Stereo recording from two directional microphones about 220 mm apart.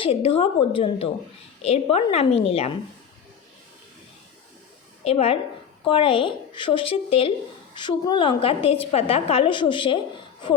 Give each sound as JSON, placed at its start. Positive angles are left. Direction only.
{"t": 0.0, "sound": "a woman's voice", "side_deg": 25}
{"t": 5.0, "sound": "a woman's voice", "side_deg": 25}